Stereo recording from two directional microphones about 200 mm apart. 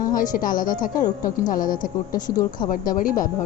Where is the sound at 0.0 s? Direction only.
45° left (ahead or behind).